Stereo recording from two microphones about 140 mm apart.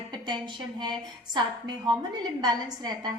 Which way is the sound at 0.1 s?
35° right (ahead or behind).